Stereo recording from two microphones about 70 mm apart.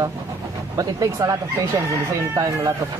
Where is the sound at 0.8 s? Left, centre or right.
Right.